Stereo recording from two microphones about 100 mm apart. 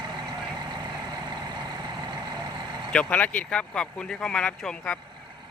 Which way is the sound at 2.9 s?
10° left (ahead or behind).